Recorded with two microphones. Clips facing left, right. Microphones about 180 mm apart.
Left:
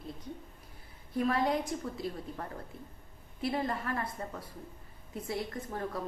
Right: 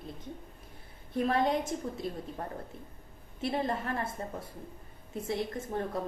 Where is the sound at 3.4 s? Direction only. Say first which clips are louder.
Right 1 dB; 25° right (ahead or behind).